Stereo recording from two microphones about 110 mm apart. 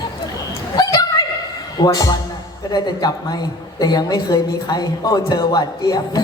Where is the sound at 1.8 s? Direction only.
35° left (ahead or behind).